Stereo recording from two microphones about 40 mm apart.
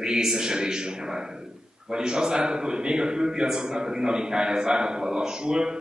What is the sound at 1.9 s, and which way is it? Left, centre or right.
A man's voice, centre.